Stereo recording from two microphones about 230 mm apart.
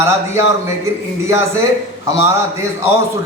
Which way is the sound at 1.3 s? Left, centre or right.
Centre.